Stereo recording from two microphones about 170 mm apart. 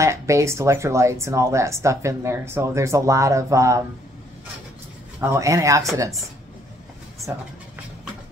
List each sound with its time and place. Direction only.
0.0 s speech: 15° right (ahead or behind)
5.2 s speech: 20° right (ahead or behind)